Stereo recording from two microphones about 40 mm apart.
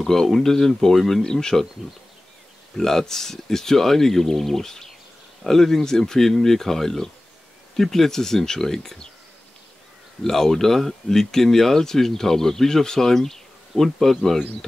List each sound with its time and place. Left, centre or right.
0.0 s speech: centre
1.2 s speech: centre
2.8 s speech: centre
10.2 s speech: centre